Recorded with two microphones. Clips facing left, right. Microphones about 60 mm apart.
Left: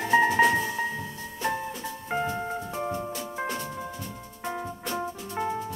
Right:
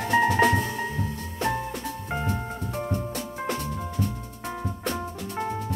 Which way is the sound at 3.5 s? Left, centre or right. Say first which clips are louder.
Right 3 dB; right.